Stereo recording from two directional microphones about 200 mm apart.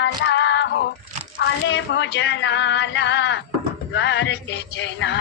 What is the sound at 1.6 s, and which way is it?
Music, 65° left (ahead or behind).